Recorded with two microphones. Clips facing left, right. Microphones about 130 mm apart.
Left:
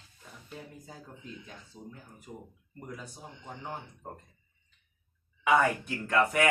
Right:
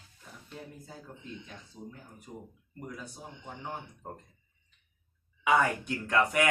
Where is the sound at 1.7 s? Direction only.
10° left (ahead or behind).